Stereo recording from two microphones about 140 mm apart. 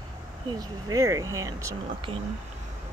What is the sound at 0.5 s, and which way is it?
Speech, 25° right (ahead or behind).